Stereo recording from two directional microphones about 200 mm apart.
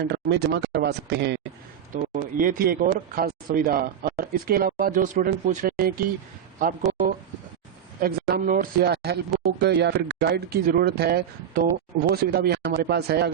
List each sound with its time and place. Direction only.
0.0 s speech: 55° right (ahead or behind)
2.4 s speech: 45° right (ahead or behind)